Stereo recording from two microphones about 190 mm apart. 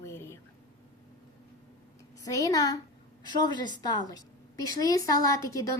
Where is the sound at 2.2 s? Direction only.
20° left (ahead or behind).